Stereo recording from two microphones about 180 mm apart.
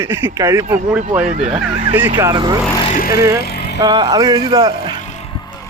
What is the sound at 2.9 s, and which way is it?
Speech, 55° left (ahead or behind).